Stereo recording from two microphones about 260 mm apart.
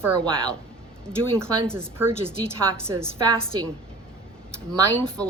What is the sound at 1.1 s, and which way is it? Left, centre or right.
A woman's voice, centre.